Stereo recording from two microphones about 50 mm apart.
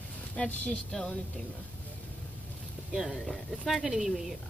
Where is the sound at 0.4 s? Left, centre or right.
Centre.